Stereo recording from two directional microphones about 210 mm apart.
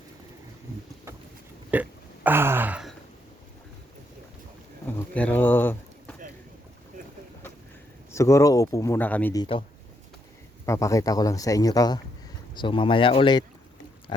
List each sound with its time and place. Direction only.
1.7 s speech: 10° right (ahead or behind)
4.9 s a sound: 10° left (ahead or behind)
8.1 s speech: 15° left (ahead or behind)
9.4 s speech: 25° left (ahead or behind)
10.7 s speech: 15° left (ahead or behind)